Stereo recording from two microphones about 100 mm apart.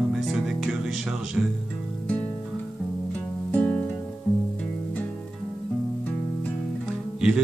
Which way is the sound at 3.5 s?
20° left (ahead or behind).